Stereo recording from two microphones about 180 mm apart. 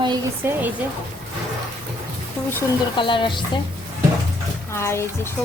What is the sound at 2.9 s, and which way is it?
Music, 25° left (ahead or behind).